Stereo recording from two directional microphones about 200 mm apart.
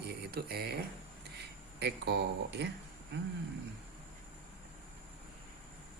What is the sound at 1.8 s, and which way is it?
Speech, 55° right (ahead or behind).